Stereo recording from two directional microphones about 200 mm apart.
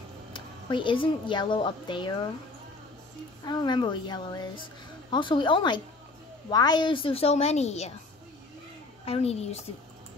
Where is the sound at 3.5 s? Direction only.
20° left (ahead or behind).